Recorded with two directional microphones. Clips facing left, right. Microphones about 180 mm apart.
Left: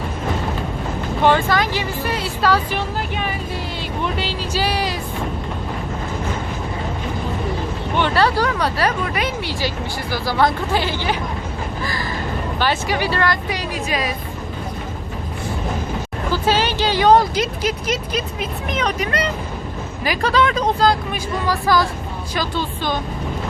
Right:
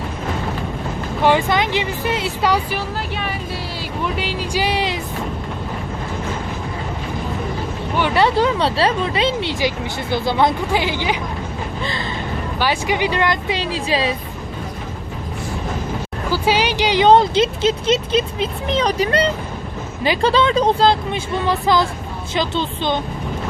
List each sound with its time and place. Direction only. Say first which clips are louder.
1.2 s speech: even; 15° right (ahead or behind)
4.0 s speech: right 2 dB; 10° right (ahead or behind)
8.1 s speech: right 4 dB; 20° right (ahead or behind)
12.5 s speech: right 1 dB; 15° right (ahead or behind)
16.3 s speech: right 1 dB; 15° right (ahead or behind)